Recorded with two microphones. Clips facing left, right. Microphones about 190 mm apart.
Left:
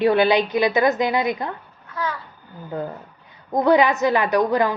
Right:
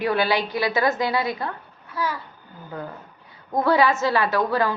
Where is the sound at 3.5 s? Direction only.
20° left (ahead or behind).